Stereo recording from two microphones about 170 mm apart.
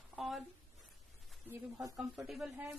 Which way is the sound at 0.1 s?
Centre (ahead or behind).